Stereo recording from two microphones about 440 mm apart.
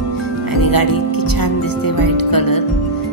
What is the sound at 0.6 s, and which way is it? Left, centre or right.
Music, left.